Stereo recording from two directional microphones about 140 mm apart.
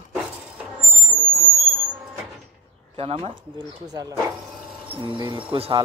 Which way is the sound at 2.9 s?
40° right (ahead or behind).